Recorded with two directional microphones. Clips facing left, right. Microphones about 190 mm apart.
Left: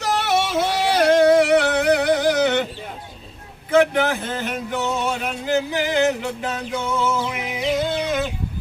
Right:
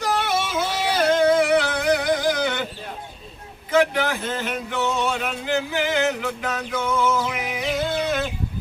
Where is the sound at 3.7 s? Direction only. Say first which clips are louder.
Left 3 dB; 55° left (ahead or behind).